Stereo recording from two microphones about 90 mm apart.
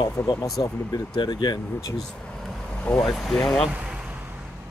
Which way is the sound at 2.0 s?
10° left (ahead or behind).